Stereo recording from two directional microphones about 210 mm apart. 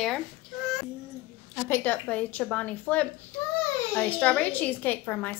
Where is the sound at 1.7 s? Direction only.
5° left (ahead or behind).